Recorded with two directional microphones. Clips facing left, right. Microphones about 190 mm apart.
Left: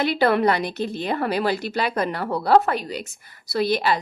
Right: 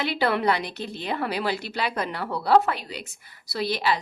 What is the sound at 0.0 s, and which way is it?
A woman's voice, 45° left (ahead or behind).